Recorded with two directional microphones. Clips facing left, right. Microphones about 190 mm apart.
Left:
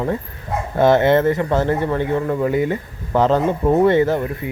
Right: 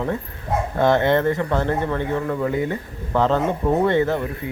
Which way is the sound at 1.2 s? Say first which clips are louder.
Left 3 dB; 20° left (ahead or behind).